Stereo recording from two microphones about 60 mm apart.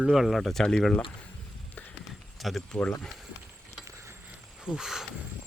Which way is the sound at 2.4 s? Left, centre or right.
Centre.